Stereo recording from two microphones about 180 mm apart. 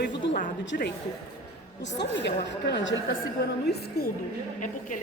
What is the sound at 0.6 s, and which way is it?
A woman's voice, 80° left.